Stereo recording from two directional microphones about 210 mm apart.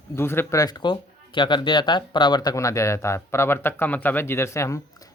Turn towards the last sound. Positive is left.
turn(degrees=15)  # may be behind; listen again after turning